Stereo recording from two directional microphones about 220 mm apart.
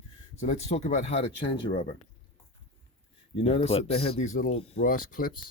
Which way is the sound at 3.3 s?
25° left (ahead or behind).